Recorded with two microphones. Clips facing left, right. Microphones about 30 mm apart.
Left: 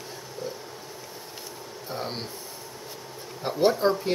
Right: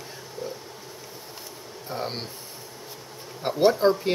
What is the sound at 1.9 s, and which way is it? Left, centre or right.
Speech, centre.